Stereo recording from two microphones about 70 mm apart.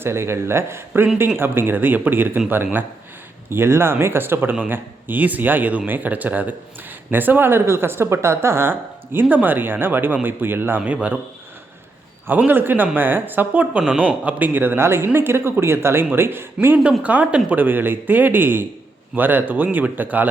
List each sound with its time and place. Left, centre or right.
0.0 s speech: right
3.5 s speech: right
9.2 s speech: right
10.8 s speech: centre
12.5 s speech: right
17.0 s speech: right